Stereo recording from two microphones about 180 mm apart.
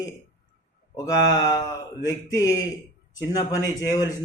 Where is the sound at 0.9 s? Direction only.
20° left (ahead or behind).